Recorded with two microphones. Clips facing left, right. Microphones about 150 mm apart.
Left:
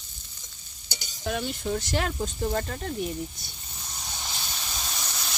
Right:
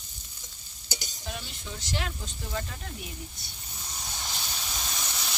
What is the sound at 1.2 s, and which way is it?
Speech, 55° left (ahead or behind).